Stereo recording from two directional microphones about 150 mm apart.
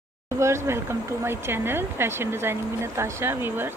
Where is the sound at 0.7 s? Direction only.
15° right (ahead or behind).